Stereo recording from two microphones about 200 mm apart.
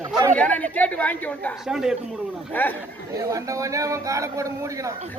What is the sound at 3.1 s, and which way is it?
Speech, 15° right (ahead or behind).